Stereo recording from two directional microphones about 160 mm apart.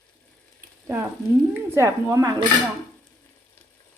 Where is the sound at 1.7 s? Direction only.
20° right (ahead or behind).